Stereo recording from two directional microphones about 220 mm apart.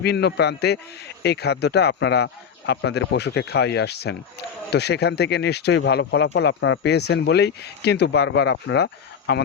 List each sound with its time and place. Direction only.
0.0 s a man's voice: 50° left (ahead or behind)